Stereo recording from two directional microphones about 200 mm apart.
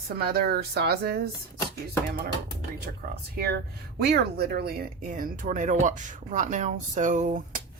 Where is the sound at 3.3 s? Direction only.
50° right (ahead or behind).